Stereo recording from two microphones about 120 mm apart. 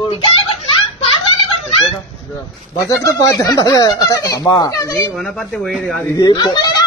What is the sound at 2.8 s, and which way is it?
Speech, 25° left (ahead or behind).